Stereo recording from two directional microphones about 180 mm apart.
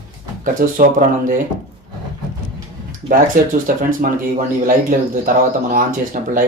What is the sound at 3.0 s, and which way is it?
Speech, 50° right (ahead or behind).